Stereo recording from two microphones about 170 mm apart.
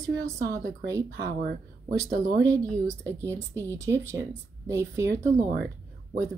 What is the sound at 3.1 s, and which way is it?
Speech, 15° right (ahead or behind).